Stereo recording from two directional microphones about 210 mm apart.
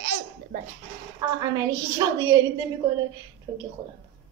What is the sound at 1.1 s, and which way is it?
Speech, 15° right (ahead or behind).